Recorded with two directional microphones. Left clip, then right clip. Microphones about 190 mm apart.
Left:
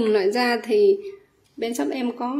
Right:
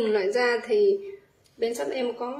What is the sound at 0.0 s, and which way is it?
A woman's voice, 45° left (ahead or behind).